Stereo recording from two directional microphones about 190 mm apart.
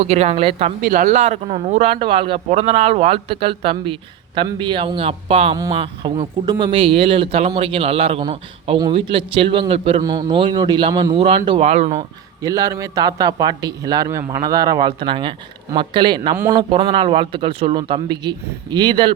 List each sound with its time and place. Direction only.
0.0 s speech: 35° right (ahead or behind)
0.8 s a man's voice: 50° right (ahead or behind); by 10.0 s 30° right (ahead or behind)
10.0 s a man's voice: 20° right (ahead or behind); by 12.0 s 35° right (ahead or behind)
12.4 s a man's voice: 15° right (ahead or behind)